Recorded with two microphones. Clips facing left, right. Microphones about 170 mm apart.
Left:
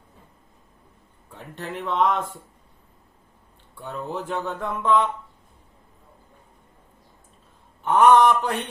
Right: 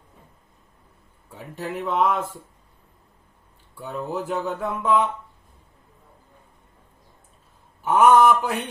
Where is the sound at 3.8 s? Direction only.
5° right (ahead or behind).